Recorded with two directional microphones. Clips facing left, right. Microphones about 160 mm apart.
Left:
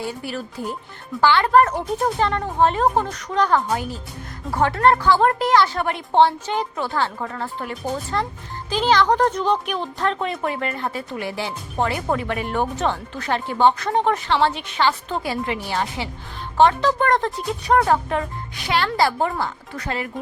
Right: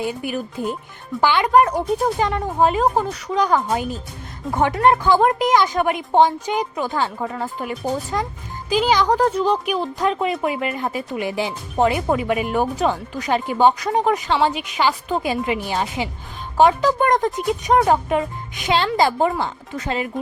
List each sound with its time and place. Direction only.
0.0 s speech: 15° right (ahead or behind)
3.7 s speech: 20° right (ahead or behind)